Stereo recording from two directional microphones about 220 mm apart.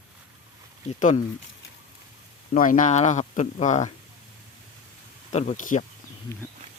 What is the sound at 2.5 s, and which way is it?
Speech, 35° left (ahead or behind).